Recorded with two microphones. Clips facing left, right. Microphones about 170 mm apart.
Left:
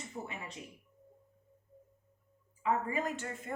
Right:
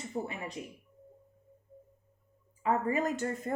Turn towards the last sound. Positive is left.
turn(degrees=-40)  # may be behind; listen again after turning